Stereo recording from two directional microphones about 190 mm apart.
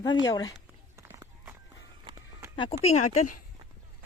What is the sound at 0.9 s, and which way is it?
Run, 15° right (ahead or behind).